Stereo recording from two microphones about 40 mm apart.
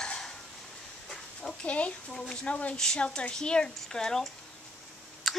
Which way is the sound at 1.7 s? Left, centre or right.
Left.